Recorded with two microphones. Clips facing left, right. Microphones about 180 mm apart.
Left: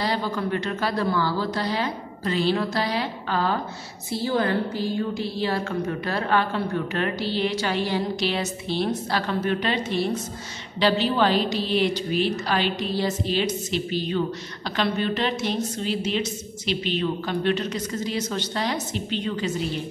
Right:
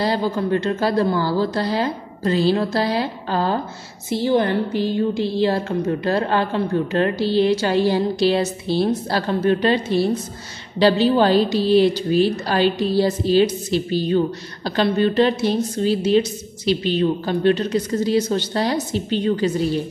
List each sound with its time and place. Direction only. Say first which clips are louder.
0.2 s a woman's voice: right 6 dB; 30° right (ahead or behind)
4.1 s a woman's voice: right 5 dB; 20° right (ahead or behind)